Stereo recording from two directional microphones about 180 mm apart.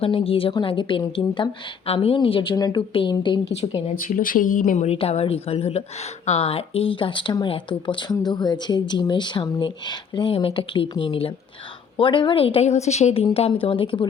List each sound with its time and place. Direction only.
0.0 s speech: 30° left (ahead or behind)
3.9 s speech: 45° left (ahead or behind); by 14.1 s 30° left (ahead or behind)